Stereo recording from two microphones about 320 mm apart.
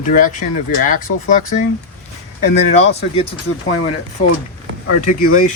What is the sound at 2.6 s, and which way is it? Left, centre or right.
Speech, left.